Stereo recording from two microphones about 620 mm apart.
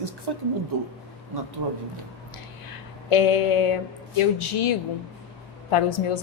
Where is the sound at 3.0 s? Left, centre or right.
Left.